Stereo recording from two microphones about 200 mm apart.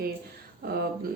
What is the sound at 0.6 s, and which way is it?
Speech, 50° right (ahead or behind).